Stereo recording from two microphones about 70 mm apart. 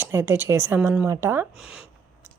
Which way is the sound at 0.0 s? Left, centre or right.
Right.